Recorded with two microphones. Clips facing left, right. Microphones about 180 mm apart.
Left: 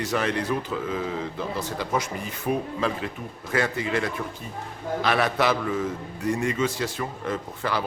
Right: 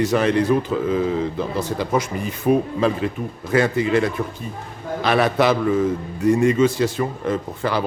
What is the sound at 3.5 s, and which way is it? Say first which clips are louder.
A man's voice: right 7 dB; 20° right (ahead or behind).